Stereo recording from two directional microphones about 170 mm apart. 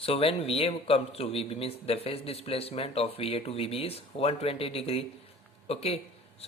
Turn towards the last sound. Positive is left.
turn(degrees=35)  # may be behind; listen again after turning